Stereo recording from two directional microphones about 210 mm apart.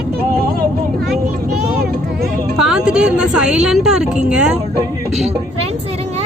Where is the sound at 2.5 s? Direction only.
5° right (ahead or behind).